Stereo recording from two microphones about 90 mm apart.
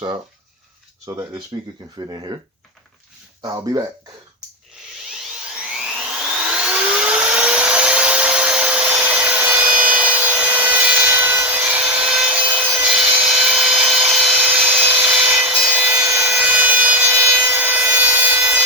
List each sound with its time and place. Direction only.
1.0 s speech: 35° right (ahead or behind)
2.0 s speech: 50° right (ahead or behind)
3.4 s speech: 40° right (ahead or behind)
5.7 s a sound: 10° right (ahead or behind)
12.5 s wood: 10° right (ahead or behind)
14.3 s wood: 10° right (ahead or behind)